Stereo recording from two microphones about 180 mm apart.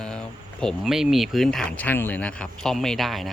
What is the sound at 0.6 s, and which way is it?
Speech, centre (ahead or behind).